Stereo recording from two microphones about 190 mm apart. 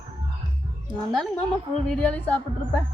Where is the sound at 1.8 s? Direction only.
5° left (ahead or behind).